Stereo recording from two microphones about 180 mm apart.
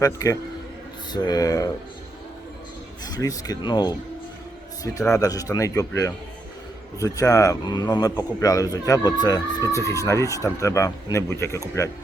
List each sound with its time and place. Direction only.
0.0 s a man's voice: 20° left (ahead or behind)
3.0 s speech: 20° left (ahead or behind)
5.1 s a man's voice: 20° left (ahead or behind)